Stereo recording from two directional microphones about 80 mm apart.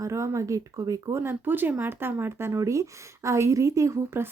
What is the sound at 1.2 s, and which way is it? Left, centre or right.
A woman's voice, right.